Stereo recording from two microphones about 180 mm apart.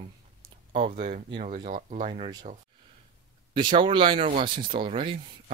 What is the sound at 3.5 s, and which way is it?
Speech, 25° right (ahead or behind).